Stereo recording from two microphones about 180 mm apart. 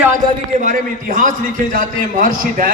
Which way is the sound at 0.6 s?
45° right (ahead or behind).